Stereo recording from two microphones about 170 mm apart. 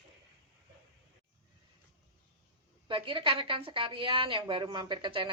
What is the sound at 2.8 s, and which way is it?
A woman's voice, 30° right (ahead or behind).